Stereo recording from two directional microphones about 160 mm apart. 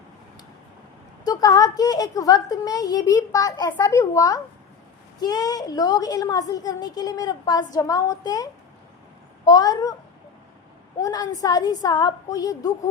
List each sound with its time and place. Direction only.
1.2 s a woman's voice: 25° left (ahead or behind)
9.5 s a woman's voice: 25° left (ahead or behind)
11.0 s a woman's voice: 25° left (ahead or behind)